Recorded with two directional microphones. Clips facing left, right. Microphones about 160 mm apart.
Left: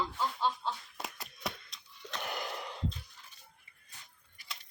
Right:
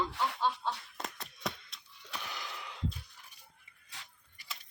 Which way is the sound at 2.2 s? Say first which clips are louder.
Left 8 dB; 50° left (ahead or behind).